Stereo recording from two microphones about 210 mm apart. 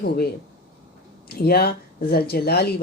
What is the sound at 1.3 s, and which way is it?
Speech, 45° left (ahead or behind).